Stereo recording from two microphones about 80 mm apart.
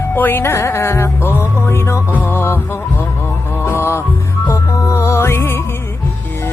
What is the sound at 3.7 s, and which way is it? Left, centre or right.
Music, left.